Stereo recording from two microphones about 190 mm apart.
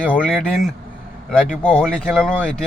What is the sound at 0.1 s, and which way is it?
Speech, 5° left (ahead or behind).